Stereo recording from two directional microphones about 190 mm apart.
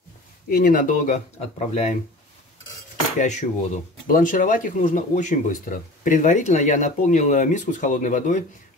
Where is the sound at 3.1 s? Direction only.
40° left (ahead or behind).